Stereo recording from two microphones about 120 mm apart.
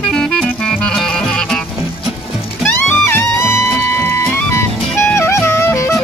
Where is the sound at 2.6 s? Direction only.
15° left (ahead or behind).